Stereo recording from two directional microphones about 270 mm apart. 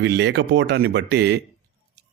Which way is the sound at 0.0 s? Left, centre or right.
Right.